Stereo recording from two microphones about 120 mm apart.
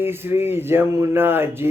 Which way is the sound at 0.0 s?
20° right (ahead or behind).